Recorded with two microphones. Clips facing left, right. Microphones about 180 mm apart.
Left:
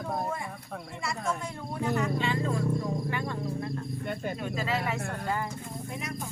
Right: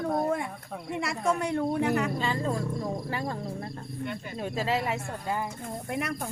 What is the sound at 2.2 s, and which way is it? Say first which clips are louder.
Speech: even; 40° right (ahead or behind).